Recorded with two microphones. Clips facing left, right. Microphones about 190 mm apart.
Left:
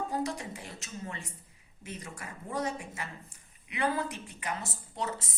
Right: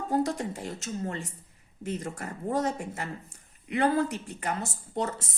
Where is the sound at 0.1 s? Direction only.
45° right (ahead or behind).